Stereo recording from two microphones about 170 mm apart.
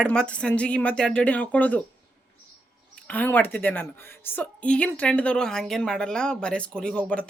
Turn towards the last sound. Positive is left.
turn(degrees=5)  # may be behind; listen again after turning